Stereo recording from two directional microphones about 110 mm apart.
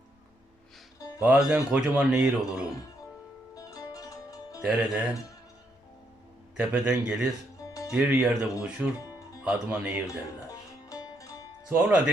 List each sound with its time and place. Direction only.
0.9 s music: 30° left (ahead or behind)
1.2 s speech: 10° right (ahead or behind)
3.5 s music: 35° left (ahead or behind)
4.6 s speech: 5° right (ahead or behind)
6.6 s speech: 10° right (ahead or behind)
10.8 s music: 35° left (ahead or behind)
11.7 s speech: 15° right (ahead or behind)